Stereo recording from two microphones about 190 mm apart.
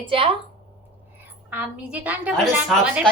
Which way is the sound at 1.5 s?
10° right (ahead or behind).